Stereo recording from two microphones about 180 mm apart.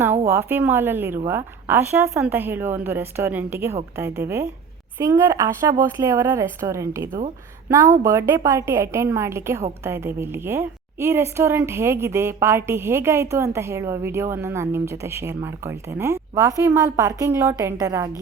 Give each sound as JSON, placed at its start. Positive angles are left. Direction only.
{"t": 0.3, "sound": "a woman's voice", "side_deg": -10}